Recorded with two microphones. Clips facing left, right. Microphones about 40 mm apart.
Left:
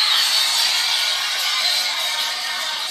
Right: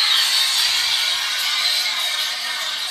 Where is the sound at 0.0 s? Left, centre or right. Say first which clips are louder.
Even; centre.